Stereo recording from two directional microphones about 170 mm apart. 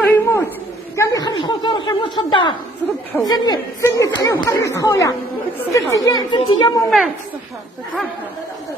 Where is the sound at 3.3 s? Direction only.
25° left (ahead or behind).